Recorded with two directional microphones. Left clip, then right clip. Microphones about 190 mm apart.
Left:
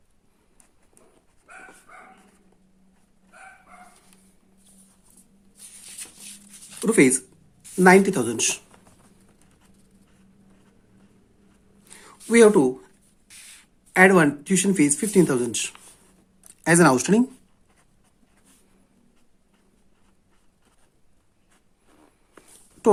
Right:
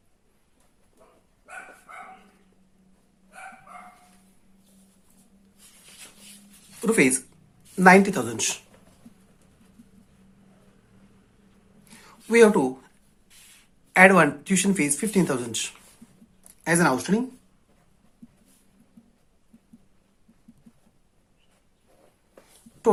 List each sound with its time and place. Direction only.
6.8 s speech: 30° left (ahead or behind)
11.9 s a sound: 45° left (ahead or behind)
13.9 s speech: 25° left (ahead or behind)
16.5 s speech: 45° left (ahead or behind)